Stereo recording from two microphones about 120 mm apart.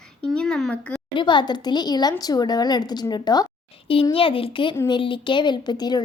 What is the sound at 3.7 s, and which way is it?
A woman's voice, 50° left (ahead or behind).